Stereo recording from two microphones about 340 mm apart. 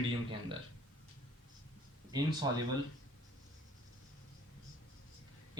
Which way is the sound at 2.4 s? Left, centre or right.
Centre.